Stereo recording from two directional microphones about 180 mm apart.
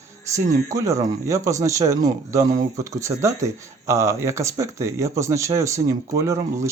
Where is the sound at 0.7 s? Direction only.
15° right (ahead or behind).